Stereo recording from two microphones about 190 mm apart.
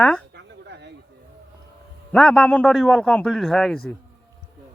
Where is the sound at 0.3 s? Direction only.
65° right (ahead or behind).